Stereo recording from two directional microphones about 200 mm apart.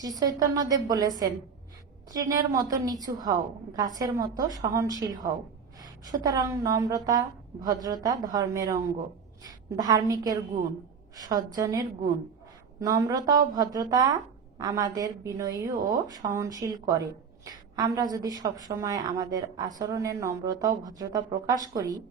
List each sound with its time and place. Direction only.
0.0 s a woman's voice: 20° right (ahead or behind)
2.1 s a woman's voice: 20° right (ahead or behind)